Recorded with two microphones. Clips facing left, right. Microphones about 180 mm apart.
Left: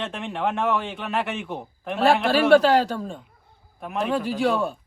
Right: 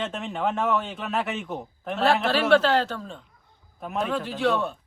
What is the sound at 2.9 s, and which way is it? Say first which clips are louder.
Speech: left 5 dB; 40° left (ahead or behind).